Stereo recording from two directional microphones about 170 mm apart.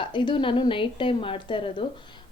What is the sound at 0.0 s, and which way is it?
A woman's voice, 30° left (ahead or behind).